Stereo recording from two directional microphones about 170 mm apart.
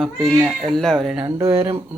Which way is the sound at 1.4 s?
35° right (ahead or behind).